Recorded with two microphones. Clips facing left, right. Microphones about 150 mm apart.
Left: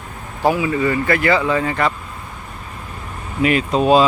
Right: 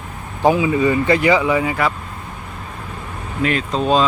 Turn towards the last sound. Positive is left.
turn(degrees=10)  # may be behind; listen again after turning